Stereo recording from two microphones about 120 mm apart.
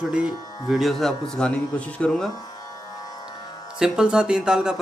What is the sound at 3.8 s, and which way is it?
A man's voice, 5° right (ahead or behind).